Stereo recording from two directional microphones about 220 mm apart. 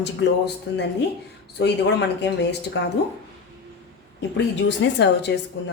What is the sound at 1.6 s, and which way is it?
Speech, 50° left (ahead or behind).